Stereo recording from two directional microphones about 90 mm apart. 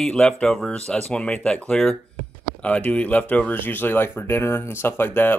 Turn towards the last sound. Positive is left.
turn(degrees=20)  # may be behind; listen again after turning